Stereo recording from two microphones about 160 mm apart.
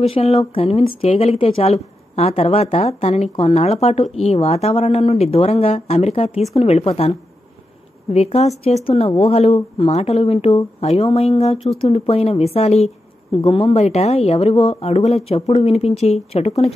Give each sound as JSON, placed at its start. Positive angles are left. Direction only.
{"t": 0.0, "sound": "speech", "side_deg": 40}